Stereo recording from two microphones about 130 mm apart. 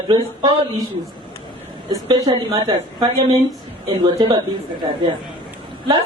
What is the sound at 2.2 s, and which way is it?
A woman's voice, 30° right (ahead or behind).